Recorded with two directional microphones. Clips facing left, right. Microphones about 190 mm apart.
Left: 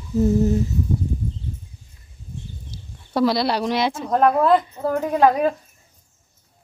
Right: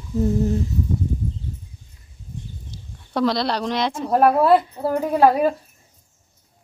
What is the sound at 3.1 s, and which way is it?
Speech, 5° left (ahead or behind).